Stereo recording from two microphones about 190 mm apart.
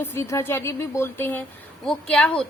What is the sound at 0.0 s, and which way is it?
A woman's voice, 15° left (ahead or behind).